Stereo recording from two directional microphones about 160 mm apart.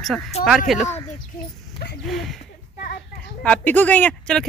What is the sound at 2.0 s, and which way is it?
Speech, centre (ahead or behind).